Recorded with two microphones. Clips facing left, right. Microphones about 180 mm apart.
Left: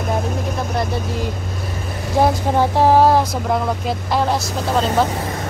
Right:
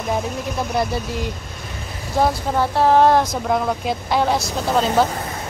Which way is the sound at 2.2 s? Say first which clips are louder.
Left 3 dB; 15° left (ahead or behind).